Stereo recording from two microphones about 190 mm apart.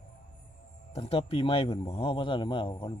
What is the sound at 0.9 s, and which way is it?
Speech, 30° left (ahead or behind).